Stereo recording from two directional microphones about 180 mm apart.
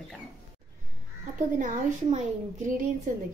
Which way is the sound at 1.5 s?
45° right (ahead or behind).